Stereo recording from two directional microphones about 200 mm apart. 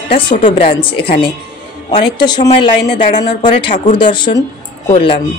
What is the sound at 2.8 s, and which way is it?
Speech, 55° left (ahead or behind).